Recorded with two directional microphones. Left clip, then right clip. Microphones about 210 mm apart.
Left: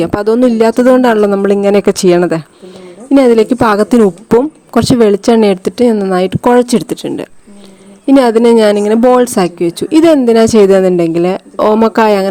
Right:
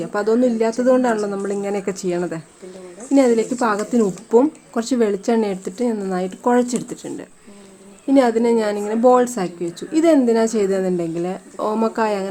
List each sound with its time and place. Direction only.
0.0 s speech: 45° left (ahead or behind)